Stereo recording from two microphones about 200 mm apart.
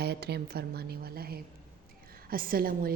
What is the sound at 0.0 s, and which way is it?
Speech, 55° right (ahead or behind).